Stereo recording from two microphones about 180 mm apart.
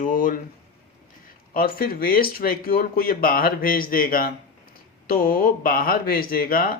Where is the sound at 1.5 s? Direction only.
55° left (ahead or behind).